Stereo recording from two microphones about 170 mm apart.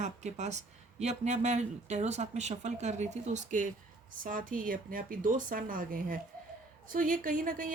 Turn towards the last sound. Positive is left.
turn(degrees=-55)  # may be behind; listen again after turning